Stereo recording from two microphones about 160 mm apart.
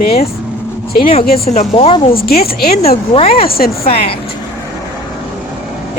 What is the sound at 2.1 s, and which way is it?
Speech, 70° left (ahead or behind).